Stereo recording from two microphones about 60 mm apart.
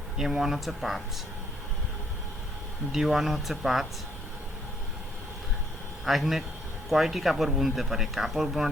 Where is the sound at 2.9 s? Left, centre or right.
Centre.